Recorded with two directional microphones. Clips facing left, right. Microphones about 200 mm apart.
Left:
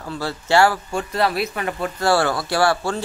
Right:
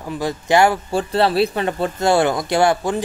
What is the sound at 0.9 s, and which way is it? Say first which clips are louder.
Speech: right 5 dB; 30° right (ahead or behind).